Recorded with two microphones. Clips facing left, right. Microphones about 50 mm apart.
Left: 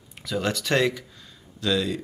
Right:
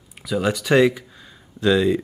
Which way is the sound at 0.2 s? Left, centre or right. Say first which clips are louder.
Right 5 dB; centre.